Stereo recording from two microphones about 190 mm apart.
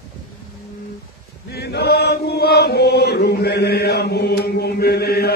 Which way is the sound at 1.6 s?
60° left (ahead or behind).